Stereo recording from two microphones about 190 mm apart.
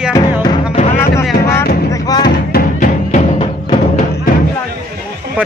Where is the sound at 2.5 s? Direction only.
40° left (ahead or behind).